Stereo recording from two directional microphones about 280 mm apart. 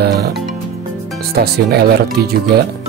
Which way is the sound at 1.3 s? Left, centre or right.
Right.